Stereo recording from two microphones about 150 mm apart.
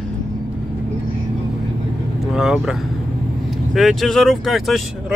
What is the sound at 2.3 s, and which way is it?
Speech, 5° right (ahead or behind).